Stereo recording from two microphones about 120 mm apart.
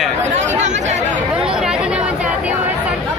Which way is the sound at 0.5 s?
80° right.